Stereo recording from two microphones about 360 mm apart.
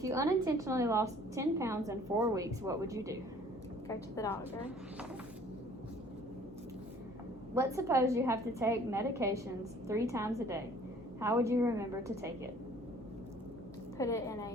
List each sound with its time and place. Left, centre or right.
0.0 s a woman's voice: centre
3.8 s a woman's voice: centre
7.5 s a woman's voice: centre
14.0 s a woman's voice: centre